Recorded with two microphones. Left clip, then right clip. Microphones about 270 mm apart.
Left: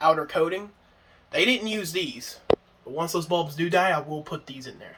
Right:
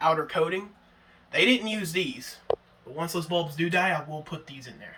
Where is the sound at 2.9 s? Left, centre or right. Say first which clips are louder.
Left 3 dB; centre.